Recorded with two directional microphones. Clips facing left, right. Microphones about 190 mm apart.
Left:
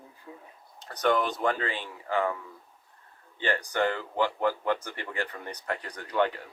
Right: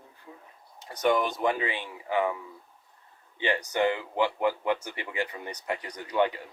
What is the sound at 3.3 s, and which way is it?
Speech, 15° right (ahead or behind).